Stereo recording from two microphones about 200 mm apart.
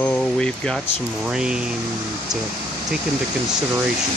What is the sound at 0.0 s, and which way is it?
Air conditioning, 5° left (ahead or behind).